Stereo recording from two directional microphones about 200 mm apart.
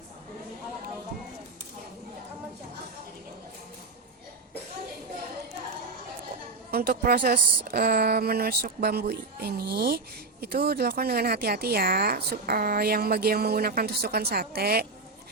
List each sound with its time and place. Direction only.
6.7 s speech: 50° right (ahead or behind)